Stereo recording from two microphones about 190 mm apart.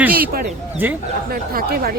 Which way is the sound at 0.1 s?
50° right (ahead or behind).